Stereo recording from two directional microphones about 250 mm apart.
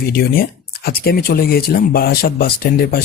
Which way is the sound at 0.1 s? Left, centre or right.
Left.